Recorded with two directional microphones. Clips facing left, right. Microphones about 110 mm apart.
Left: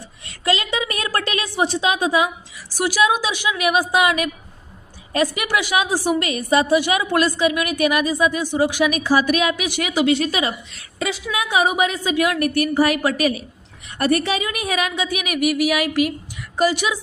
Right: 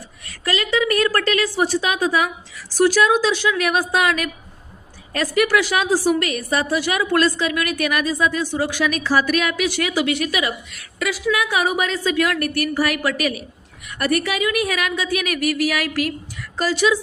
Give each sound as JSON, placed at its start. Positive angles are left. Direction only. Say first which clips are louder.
{"t": 0.3, "sound": "a woman's voice", "louder": "left 1 dB", "side_deg": 20}